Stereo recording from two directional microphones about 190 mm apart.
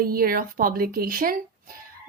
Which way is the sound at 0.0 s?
50° right (ahead or behind).